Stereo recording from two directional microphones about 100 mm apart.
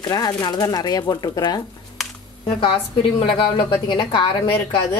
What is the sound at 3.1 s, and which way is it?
Speech, 55° left (ahead or behind).